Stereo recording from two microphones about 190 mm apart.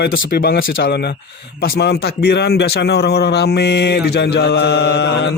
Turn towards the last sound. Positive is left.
turn(degrees=60)  # may be behind; listen again after turning